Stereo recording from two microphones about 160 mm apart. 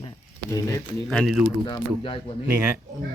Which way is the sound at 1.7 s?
30° left (ahead or behind).